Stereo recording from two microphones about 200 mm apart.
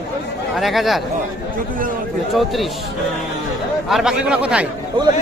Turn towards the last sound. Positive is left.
turn(degrees=-25)  # may be behind; listen again after turning